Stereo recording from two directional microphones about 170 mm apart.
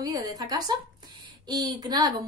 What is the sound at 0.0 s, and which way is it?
A woman's voice, 20° right (ahead or behind).